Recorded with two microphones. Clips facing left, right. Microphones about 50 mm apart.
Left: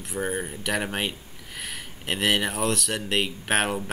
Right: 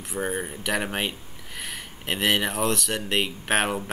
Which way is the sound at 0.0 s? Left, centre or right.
Centre.